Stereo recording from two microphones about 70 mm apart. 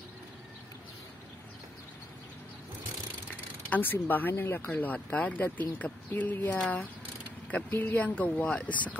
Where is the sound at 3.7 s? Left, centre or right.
Left.